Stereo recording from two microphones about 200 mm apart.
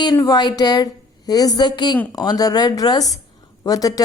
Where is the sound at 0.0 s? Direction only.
20° left (ahead or behind).